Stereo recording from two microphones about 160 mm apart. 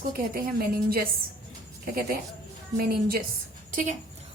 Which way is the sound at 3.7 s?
55° right (ahead or behind).